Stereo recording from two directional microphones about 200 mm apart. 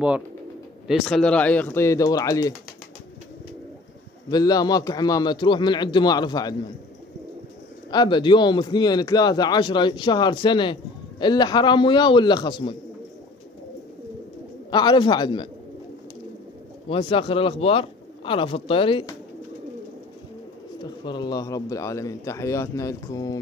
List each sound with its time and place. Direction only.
0.8 s speech: centre (ahead or behind); by 2.5 s 15° left (ahead or behind)
4.3 s a man's voice: 20° left (ahead or behind)
7.9 s a man's voice: 20° left (ahead or behind)
14.7 s a man's voice: 20° left (ahead or behind)
16.9 s a man's voice: 25° left (ahead or behind)
20.8 s speech: 20° left (ahead or behind)